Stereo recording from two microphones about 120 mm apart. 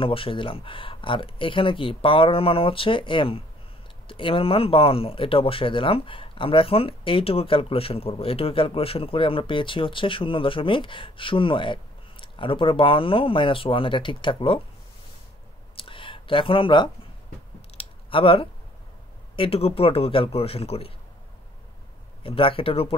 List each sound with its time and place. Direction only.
0.0 s speech: 50° left (ahead or behind)
15.7 s clicking: 45° left (ahead or behind)
17.6 s a sound: 50° left (ahead or behind)
19.3 s speech: 50° left (ahead or behind)
22.2 s speech: 50° left (ahead or behind)